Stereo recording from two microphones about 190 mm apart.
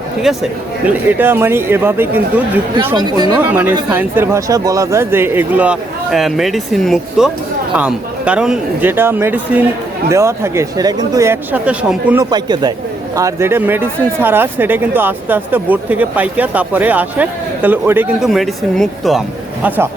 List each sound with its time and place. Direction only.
0.3 s speech: centre (ahead or behind)
2.9 s speech: 20° right (ahead or behind)
3.8 s speech: 10° right (ahead or behind)
12.2 s speech: 20° right (ahead or behind)